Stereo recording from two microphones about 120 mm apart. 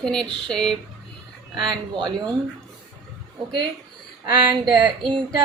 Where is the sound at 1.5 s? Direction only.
40° right (ahead or behind).